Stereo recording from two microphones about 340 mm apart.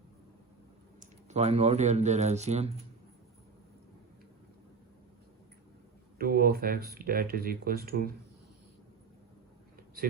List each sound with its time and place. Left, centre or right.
0.9 s speech: centre
6.1 s speech: right